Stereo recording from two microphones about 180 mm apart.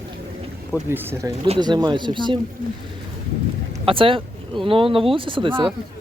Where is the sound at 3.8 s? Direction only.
30° right (ahead or behind).